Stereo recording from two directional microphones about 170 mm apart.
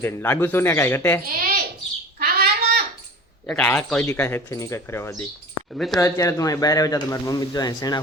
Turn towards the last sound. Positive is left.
turn(degrees=25)  # may be behind; listen again after turning